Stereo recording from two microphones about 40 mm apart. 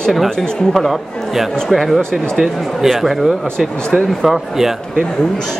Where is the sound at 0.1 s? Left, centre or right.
Centre.